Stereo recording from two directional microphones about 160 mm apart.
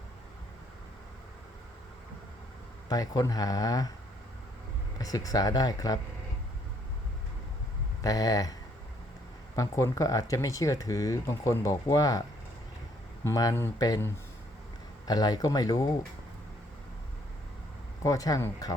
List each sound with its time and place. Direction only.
2.9 s speech: 20° left (ahead or behind)
4.9 s speech: 20° left (ahead or behind)
8.0 s speech: 20° left (ahead or behind)
9.6 s speech: 20° left (ahead or behind)
13.2 s speech: 20° left (ahead or behind)
18.0 s speech: 20° left (ahead or behind)